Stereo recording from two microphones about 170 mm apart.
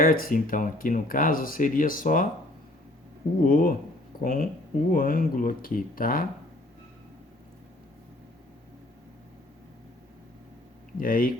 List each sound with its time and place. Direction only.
0.0 s speech: 55° left (ahead or behind)
3.4 s speech: 55° left (ahead or behind)
10.9 s speech: 55° left (ahead or behind)